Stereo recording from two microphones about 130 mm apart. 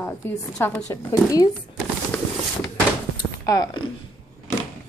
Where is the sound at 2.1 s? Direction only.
20° left (ahead or behind).